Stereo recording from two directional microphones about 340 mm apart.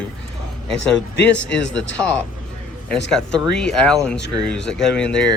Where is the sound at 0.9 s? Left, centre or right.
Left.